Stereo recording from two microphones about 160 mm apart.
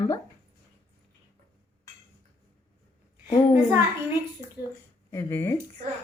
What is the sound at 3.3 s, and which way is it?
Speech, 30° left (ahead or behind).